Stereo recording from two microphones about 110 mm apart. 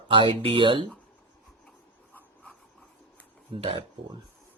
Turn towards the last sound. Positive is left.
turn(degrees=-55)  # may be behind; listen again after turning